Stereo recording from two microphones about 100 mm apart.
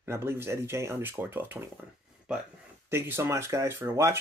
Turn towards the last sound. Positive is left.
turn(degrees=-25)  # may be behind; listen again after turning